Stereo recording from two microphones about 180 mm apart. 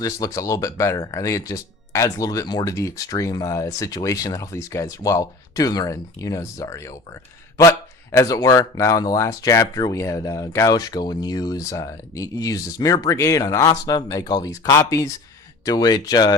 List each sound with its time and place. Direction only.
0.0 s speech: 20° left (ahead or behind)